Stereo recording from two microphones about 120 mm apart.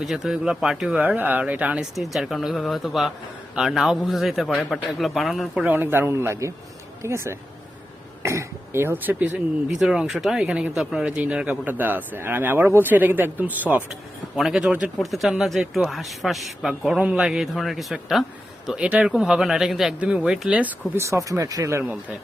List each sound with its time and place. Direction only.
0.0 s speech: centre (ahead or behind)
5.6 s a man's voice: 15° right (ahead or behind)
14.3 s speech: 5° right (ahead or behind); by 21.9 s 20° right (ahead or behind)